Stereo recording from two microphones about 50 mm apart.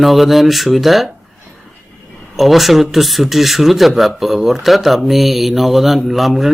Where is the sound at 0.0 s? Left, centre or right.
Centre.